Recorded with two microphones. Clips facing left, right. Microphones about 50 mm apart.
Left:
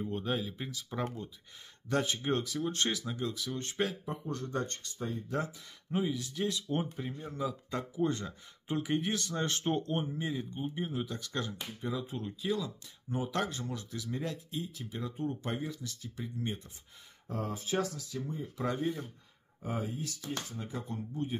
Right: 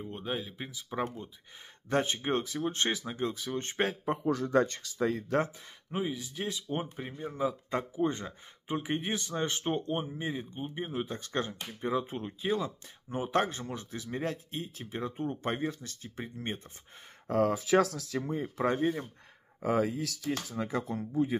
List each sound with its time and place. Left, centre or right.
0.0 s speech: centre
1.9 s speech: right
4.1 s speech: right
5.9 s speech: right
17.3 s speech: right
18.6 s speech: right
19.6 s speech: right